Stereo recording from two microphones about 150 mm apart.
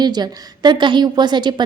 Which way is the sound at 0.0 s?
30° right (ahead or behind).